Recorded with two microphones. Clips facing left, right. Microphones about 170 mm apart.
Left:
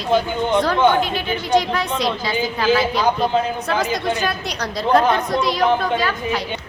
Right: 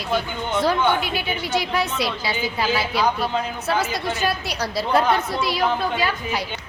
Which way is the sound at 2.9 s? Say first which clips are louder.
Left 3 dB; 45° left (ahead or behind).